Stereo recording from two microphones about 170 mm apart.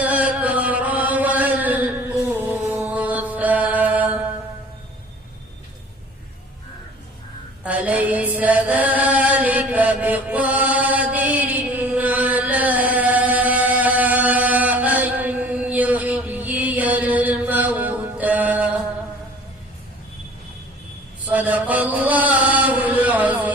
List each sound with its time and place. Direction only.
0.0 s chant: 10° right (ahead or behind)
2.6 s mantra: 10° right (ahead or behind)
7.6 s chant: 10° right (ahead or behind)
21.2 s chant: 10° right (ahead or behind)